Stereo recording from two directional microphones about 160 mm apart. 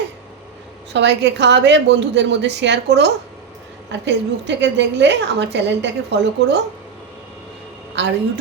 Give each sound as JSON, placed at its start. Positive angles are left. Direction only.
{"t": 0.9, "sound": "a woman's voice", "side_deg": -90}
{"t": 8.0, "sound": "a woman's voice", "side_deg": -90}